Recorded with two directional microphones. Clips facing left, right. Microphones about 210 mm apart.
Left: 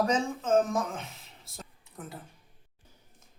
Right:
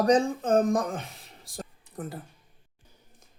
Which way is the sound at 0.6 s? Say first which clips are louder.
Right 3 dB; 55° right (ahead or behind).